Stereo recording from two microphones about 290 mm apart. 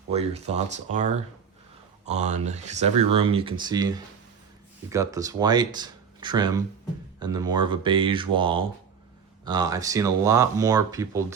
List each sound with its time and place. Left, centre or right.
0.1 s speech: right